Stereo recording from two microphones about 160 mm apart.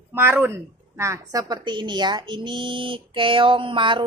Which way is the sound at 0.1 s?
15° right (ahead or behind).